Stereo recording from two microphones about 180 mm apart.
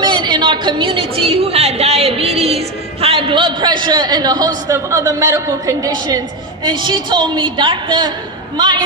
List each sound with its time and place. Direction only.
0.0 s a woman's voice: 25° right (ahead or behind)